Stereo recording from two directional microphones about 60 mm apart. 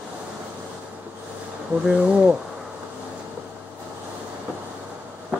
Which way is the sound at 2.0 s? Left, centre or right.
Centre.